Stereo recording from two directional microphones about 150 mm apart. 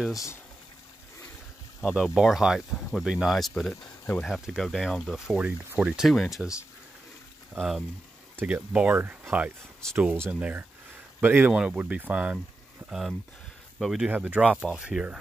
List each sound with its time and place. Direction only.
0.1 s speech: 20° left (ahead or behind)
1.8 s speech: centre (ahead or behind)
7.5 s speech: centre (ahead or behind)
13.7 s speech: centre (ahead or behind)